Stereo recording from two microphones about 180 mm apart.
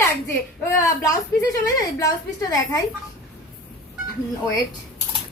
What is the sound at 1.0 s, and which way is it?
A woman's voice, 20° left (ahead or behind).